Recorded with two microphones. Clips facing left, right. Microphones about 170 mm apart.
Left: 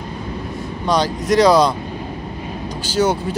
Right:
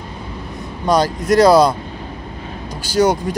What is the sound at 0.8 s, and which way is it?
Speech, 10° right (ahead or behind).